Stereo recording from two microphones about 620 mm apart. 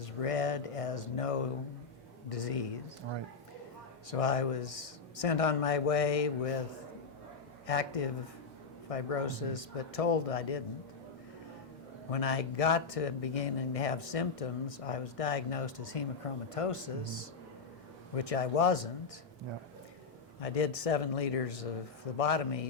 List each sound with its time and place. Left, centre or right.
0.0 s speech: left
4.1 s speech: left
7.7 s speech: left
12.1 s speech: left
20.4 s speech: left